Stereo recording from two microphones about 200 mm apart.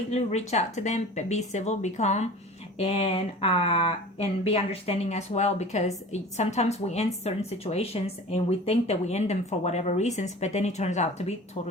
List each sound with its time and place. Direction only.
0.1 s speech: 35° left (ahead or behind)